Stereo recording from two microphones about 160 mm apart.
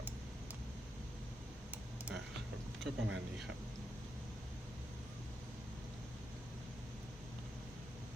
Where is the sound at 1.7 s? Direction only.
10° right (ahead or behind).